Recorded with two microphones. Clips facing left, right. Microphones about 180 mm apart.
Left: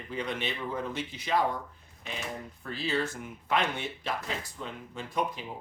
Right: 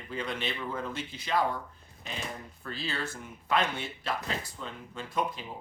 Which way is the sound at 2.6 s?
15° left (ahead or behind).